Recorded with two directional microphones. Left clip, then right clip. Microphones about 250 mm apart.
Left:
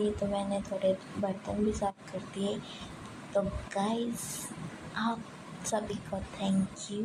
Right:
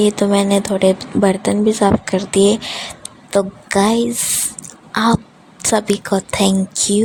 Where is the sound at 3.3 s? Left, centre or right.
Right.